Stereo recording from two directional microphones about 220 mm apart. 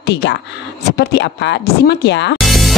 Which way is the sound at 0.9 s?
50° left (ahead or behind).